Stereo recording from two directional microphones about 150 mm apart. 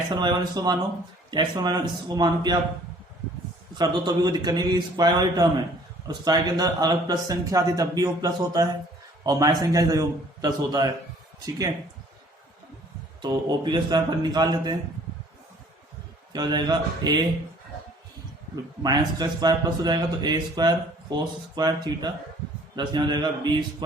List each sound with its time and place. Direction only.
0.1 s a man's voice: 30° right (ahead or behind)
3.8 s a man's voice: 30° right (ahead or behind)
13.2 s a man's voice: 30° right (ahead or behind)
16.3 s a man's voice: 30° right (ahead or behind)
18.8 s a man's voice: 25° right (ahead or behind)